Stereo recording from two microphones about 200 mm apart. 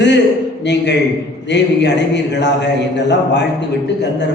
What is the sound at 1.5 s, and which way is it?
Speech, 60° left (ahead or behind).